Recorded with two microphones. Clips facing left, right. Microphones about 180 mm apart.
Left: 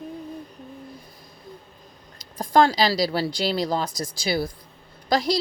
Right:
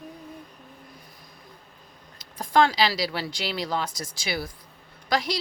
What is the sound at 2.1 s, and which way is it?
A woman's voice, 40° left (ahead or behind).